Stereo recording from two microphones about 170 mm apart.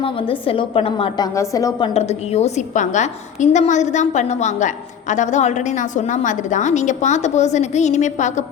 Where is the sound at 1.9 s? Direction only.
40° left (ahead or behind).